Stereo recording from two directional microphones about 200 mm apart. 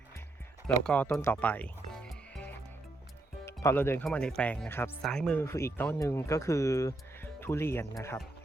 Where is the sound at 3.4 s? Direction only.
15° left (ahead or behind).